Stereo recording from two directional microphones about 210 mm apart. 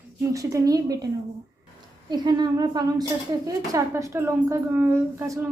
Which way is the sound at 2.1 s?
20° right (ahead or behind).